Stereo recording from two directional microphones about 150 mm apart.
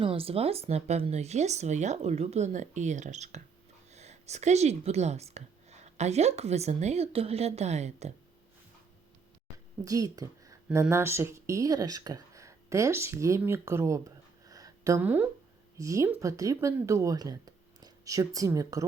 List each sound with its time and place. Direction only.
0.0 s speech: 40° right (ahead or behind)
9.8 s speech: 25° right (ahead or behind)
14.4 s a sound: 25° right (ahead or behind)
15.8 s speech: 20° right (ahead or behind)